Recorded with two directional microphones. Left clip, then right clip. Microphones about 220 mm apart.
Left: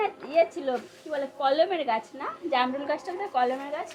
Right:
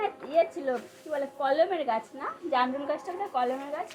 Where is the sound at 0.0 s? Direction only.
15° right (ahead or behind).